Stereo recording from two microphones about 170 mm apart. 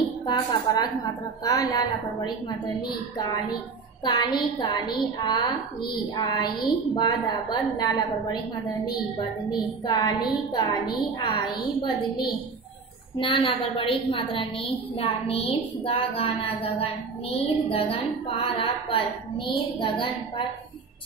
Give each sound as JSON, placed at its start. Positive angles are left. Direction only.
{"t": 0.3, "sound": "a woman's voice", "side_deg": 25}
{"t": 9.5, "sound": "a woman's voice", "side_deg": 25}